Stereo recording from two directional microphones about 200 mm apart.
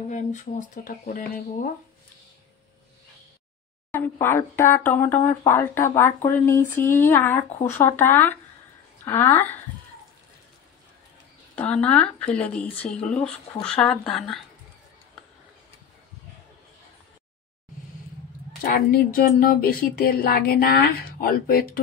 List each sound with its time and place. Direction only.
0.1 s speech: 40° left (ahead or behind)
3.9 s speech: 10° left (ahead or behind)
11.5 s speech: 5° left (ahead or behind)
18.6 s speech: 50° left (ahead or behind)